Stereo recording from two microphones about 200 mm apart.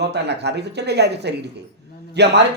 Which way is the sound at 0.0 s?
55° right (ahead or behind).